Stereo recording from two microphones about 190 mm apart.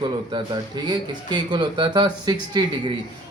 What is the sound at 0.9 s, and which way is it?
A man's voice, 25° right (ahead or behind).